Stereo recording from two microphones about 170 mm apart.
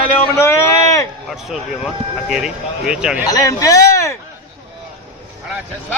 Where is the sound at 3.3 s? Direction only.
20° left (ahead or behind).